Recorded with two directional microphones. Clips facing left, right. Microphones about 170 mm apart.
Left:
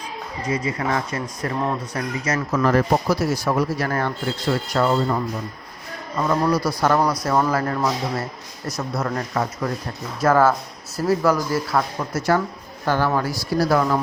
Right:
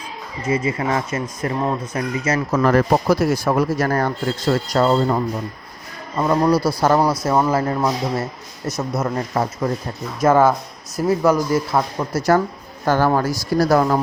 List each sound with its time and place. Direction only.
0.4 s speech: 25° right (ahead or behind)
2.6 s speech: 55° right (ahead or behind); by 11.9 s 20° right (ahead or behind)
12.1 s speech: 40° right (ahead or behind)